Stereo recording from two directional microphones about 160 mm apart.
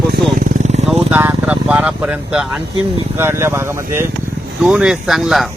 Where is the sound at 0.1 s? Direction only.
60° right (ahead or behind); by 0.9 s 45° right (ahead or behind).